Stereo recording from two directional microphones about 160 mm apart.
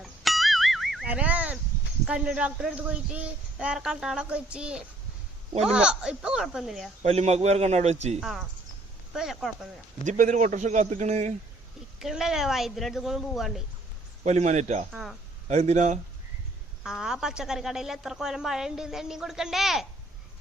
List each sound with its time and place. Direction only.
0.0 s music: centre (ahead or behind)
2.0 s a woman's voice: 5° right (ahead or behind)
7.0 s a man's voice: 40° right (ahead or behind)
8.2 s a woman's voice: centre (ahead or behind)
10.0 s a man's voice: 50° right (ahead or behind)
11.9 s a woman's voice: 5° right (ahead or behind)
14.3 s a man's voice: 45° right (ahead or behind)
16.8 s a woman's voice: 5° right (ahead or behind)